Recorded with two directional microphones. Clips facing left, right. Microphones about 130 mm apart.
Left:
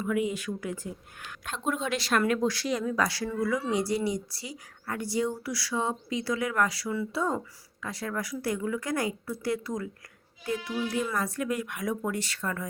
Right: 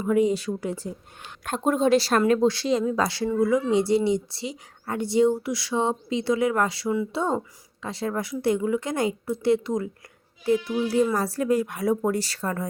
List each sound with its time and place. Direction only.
0.0 s speech: 35° right (ahead or behind)
1.5 s a woman's voice: 45° right (ahead or behind)